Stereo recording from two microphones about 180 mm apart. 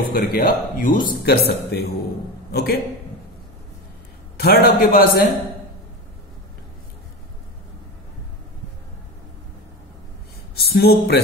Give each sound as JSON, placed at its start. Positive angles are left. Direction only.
{"t": 0.1, "sound": "a man's voice", "side_deg": 55}
{"t": 4.4, "sound": "a man's voice", "side_deg": 60}
{"t": 10.5, "sound": "speech", "side_deg": 60}